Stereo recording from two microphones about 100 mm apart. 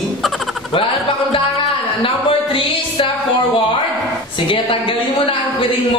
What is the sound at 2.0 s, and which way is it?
Speech, 65° left (ahead or behind).